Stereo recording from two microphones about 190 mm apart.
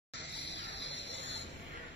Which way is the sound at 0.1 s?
65° left (ahead or behind).